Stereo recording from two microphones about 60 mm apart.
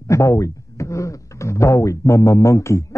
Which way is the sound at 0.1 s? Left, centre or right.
Left.